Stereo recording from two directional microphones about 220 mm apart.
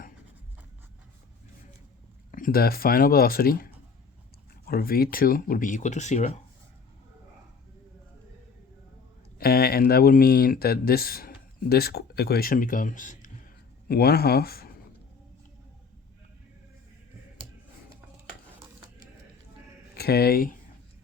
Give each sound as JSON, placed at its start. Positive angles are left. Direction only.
{"t": 2.3, "sound": "speech", "side_deg": 40}
{"t": 9.4, "sound": "speech", "side_deg": 45}
{"t": 20.0, "sound": "speech", "side_deg": 45}